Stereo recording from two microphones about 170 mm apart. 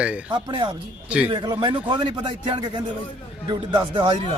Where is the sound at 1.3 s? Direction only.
25° right (ahead or behind).